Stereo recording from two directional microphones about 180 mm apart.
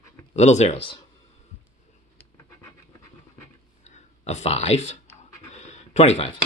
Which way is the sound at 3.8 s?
40° left (ahead or behind).